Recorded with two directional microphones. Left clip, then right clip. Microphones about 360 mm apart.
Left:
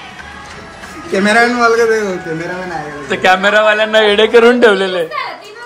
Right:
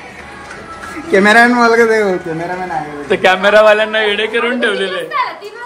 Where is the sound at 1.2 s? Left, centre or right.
Centre.